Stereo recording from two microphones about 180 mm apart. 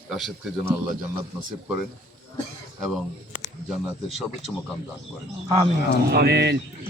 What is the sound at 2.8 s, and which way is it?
Speech, 5° right (ahead or behind).